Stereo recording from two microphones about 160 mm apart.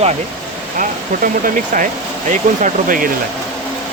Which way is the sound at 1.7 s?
55° right (ahead or behind).